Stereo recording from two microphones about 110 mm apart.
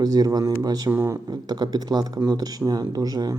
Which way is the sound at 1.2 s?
40° right (ahead or behind).